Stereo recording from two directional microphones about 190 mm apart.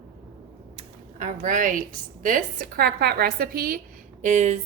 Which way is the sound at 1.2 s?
40° right (ahead or behind).